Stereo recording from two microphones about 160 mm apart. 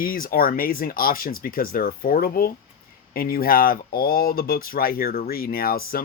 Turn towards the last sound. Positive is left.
turn(degrees=70)  # may be behind; listen again after turning